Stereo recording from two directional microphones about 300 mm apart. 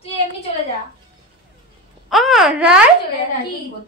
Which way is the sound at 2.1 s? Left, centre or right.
Centre.